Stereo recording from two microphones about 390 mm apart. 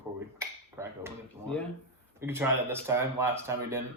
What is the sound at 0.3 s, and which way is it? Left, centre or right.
Finger snapping, centre.